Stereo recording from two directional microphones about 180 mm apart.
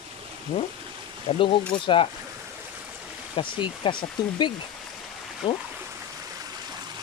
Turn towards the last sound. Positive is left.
turn(degrees=25)  # may be behind; listen again after turning